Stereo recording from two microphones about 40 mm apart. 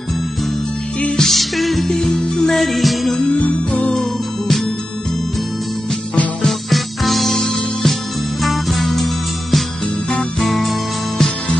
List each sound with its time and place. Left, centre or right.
1.1 s music: centre
1.9 s music: centre
2.5 s music: centre
6.7 s music: centre
7.3 s music: centre
8.4 s music: centre